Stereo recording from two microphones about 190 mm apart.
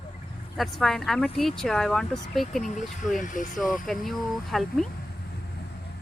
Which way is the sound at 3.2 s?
40° left (ahead or behind).